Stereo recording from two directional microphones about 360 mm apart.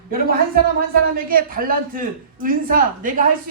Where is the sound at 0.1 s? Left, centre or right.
Right.